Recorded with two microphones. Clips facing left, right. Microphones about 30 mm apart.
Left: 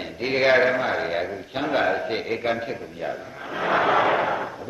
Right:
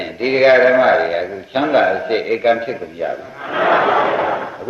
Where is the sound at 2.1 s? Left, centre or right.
Right.